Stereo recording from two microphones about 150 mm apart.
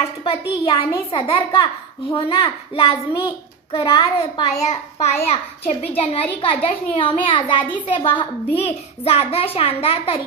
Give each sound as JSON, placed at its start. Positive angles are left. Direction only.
{"t": 0.2, "sound": "a child's voice", "side_deg": 35}